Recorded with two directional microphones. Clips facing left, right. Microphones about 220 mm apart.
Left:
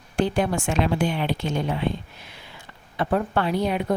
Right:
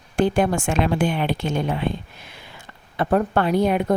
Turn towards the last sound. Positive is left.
turn(degrees=-50)  # may be behind; listen again after turning